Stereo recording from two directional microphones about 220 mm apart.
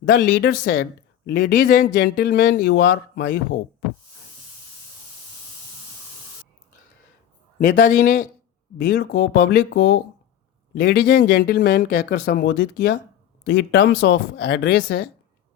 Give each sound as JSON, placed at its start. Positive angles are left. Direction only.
{"t": 0.1, "sound": "speech", "side_deg": 45}
{"t": 7.6, "sound": "speech", "side_deg": 40}